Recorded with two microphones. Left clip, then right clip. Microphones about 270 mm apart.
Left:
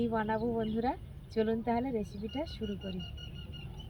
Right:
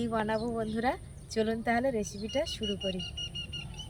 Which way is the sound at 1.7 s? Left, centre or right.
Centre.